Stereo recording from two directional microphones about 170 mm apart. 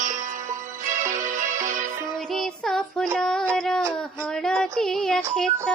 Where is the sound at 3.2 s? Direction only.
5° left (ahead or behind).